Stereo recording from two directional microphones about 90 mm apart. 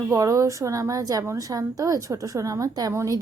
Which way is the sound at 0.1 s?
40° right (ahead or behind).